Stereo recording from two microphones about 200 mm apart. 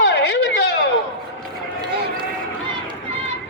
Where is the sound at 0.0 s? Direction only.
60° left (ahead or behind).